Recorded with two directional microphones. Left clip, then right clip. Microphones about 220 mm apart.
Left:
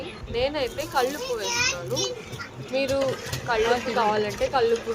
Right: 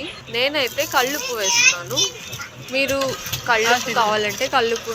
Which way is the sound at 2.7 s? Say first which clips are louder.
Right 4 dB; 15° right (ahead or behind).